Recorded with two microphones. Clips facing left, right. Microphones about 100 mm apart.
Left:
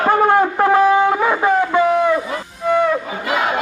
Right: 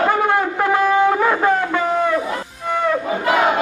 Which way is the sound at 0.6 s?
20° left (ahead or behind).